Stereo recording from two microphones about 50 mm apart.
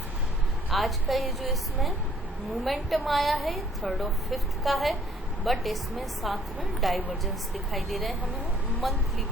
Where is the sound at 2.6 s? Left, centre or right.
Centre.